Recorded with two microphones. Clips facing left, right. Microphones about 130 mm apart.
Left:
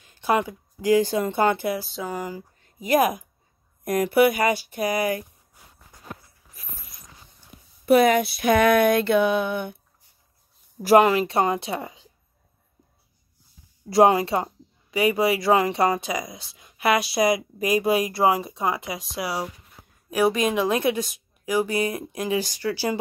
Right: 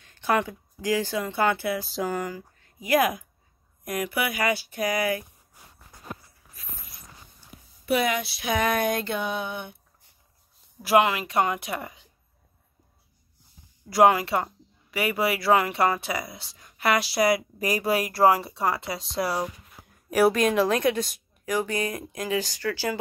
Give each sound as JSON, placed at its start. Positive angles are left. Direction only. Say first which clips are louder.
{"t": 0.0, "sound": "a sound", "louder": "left 2 dB", "side_deg": 15}
{"t": 1.0, "sound": "speech", "louder": "left 3 dB", "side_deg": 30}
{"t": 1.9, "sound": "speech", "louder": "right 2 dB", "side_deg": 0}
{"t": 2.6, "sound": "speech", "louder": "left 2 dB", "side_deg": 25}
{"t": 7.3, "sound": "speech", "louder": "even", "side_deg": 45}
{"t": 10.8, "sound": "speech", "louder": "left 5 dB", "side_deg": 40}
{"t": 13.8, "sound": "a woman's voice", "louder": "left 2 dB", "side_deg": 25}
{"t": 20.7, "sound": "speech", "louder": "left 1 dB", "side_deg": 10}